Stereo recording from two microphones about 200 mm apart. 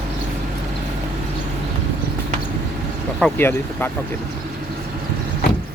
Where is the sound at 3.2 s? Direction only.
5° left (ahead or behind).